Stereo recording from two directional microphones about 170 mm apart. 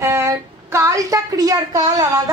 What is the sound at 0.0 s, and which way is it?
Speech, 15° right (ahead or behind).